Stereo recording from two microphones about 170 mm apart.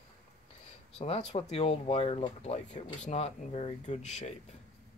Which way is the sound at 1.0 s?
40° left (ahead or behind).